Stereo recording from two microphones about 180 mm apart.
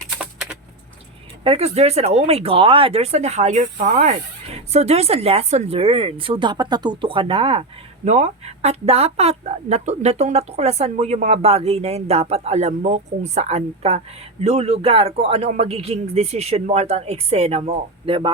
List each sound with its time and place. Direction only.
1.5 s speech: 35° right (ahead or behind)
4.5 s speech: 35° right (ahead or behind)